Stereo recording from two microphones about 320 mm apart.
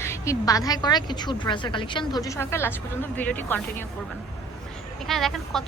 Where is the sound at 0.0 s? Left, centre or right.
Centre.